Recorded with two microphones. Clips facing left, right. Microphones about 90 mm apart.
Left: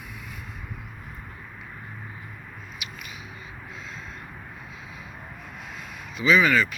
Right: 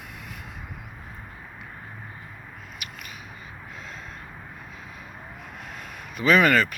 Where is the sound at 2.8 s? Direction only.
50° right (ahead or behind).